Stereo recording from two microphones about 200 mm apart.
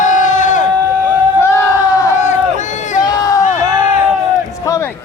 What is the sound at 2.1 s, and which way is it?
Run, 35° left (ahead or behind).